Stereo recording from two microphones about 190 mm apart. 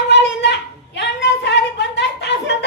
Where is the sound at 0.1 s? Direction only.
65° left (ahead or behind).